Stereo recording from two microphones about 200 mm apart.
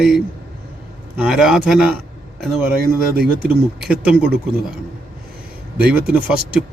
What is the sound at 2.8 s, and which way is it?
Speech, 50° right (ahead or behind).